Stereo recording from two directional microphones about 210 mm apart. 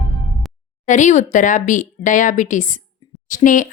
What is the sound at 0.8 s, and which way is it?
Speech, 35° left (ahead or behind).